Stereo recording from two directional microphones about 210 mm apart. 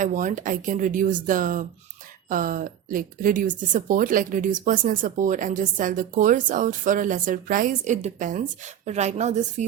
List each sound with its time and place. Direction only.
0.0 s speech: 35° right (ahead or behind)